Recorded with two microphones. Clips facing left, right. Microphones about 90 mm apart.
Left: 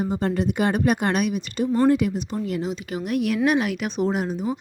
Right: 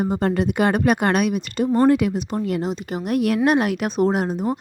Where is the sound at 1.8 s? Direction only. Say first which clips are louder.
Right 2 dB; 65° right (ahead or behind).